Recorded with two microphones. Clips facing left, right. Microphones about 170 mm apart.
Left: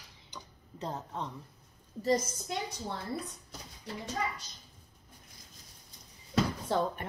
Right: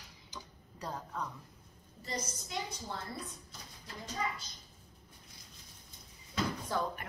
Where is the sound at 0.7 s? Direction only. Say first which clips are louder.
Left 3 dB; 25° left (ahead or behind).